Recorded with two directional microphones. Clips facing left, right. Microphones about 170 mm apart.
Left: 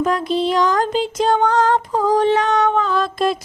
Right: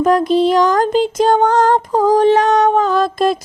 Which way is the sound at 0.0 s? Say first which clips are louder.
Right 6 dB; 45° right (ahead or behind).